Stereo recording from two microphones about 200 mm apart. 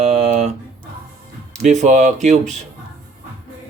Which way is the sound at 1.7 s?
35° right (ahead or behind).